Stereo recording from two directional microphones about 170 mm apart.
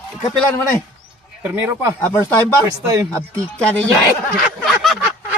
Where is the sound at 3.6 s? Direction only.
10° left (ahead or behind).